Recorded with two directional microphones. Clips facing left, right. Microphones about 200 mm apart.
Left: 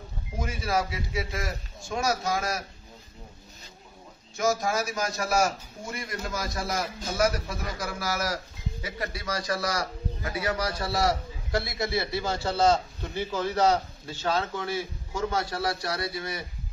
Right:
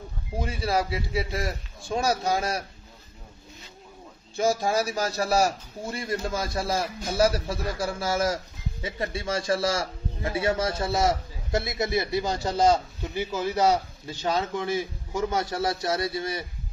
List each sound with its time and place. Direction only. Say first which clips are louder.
0.4 s a man's voice: right 2 dB; 30° right (ahead or behind)
4.4 s a man's voice: right 2 dB; 30° right (ahead or behind)